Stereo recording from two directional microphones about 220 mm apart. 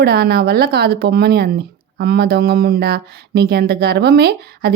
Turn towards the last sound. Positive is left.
turn(degrees=-45)  # may be behind; listen again after turning